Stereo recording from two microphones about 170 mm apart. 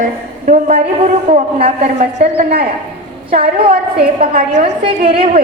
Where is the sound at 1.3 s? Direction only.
35° right (ahead or behind).